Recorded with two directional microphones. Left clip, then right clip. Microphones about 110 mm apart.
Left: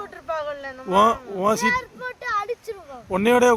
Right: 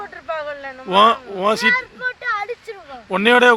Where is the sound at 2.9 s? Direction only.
5° left (ahead or behind).